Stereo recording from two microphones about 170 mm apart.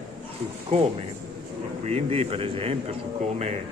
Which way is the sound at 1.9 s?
35° right (ahead or behind).